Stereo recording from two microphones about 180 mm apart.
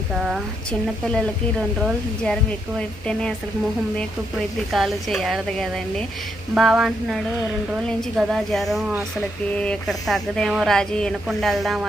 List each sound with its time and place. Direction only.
0.2 s speech: centre (ahead or behind)
4.7 s speech: centre (ahead or behind)